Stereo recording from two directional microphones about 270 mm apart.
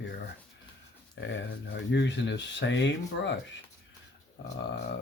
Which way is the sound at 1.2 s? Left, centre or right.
Left.